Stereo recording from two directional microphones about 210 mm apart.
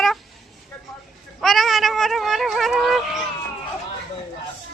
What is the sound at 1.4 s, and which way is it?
A woman's voice, centre (ahead or behind).